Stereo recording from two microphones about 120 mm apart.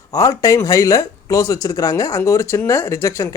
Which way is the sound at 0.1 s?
30° left (ahead or behind).